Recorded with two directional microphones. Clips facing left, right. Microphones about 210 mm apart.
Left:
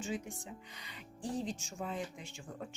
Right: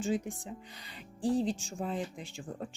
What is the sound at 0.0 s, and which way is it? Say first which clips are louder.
Speech: right 7 dB; 35° right (ahead or behind).